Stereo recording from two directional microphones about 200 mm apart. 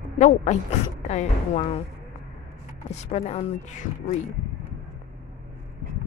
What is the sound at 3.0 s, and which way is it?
Speech, 35° left (ahead or behind).